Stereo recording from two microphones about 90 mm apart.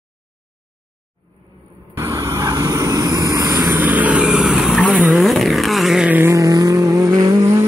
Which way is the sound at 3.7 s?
20° right (ahead or behind).